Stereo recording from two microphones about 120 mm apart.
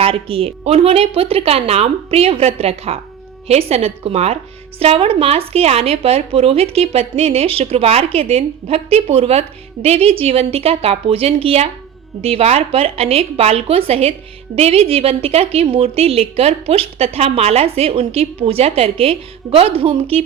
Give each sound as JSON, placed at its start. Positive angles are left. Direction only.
{"t": 0.0, "sound": "a woman's voice", "side_deg": -50}